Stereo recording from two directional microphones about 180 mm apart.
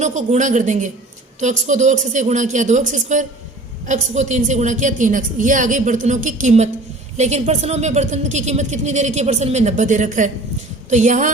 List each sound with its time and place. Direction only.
0.0 s a woman's voice: 40° right (ahead or behind)